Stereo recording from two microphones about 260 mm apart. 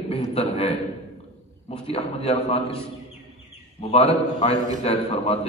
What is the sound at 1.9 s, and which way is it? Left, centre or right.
Speech, left.